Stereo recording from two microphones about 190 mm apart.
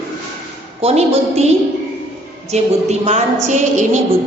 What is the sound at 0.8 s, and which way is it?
Speech, 35° right (ahead or behind).